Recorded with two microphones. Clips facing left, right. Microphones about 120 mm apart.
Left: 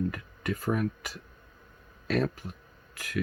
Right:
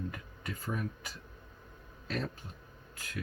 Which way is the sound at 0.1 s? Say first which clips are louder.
Left 9 dB; 80° left.